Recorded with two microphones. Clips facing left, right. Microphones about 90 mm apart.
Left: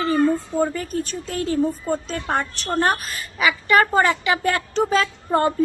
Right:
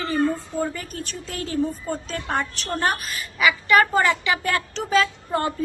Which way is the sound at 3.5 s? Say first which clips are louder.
Even; 25° left (ahead or behind).